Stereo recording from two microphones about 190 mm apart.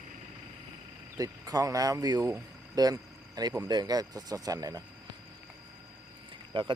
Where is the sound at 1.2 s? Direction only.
20° right (ahead or behind).